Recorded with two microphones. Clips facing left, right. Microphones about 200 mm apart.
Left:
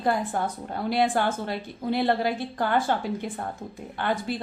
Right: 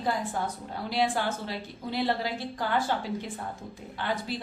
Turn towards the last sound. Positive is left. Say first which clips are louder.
# left 4 dB
turn(degrees=55)  # may be behind; listen again after turning